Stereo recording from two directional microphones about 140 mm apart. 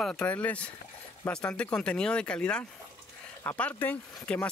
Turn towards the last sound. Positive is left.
turn(degrees=10)  # may be behind; listen again after turning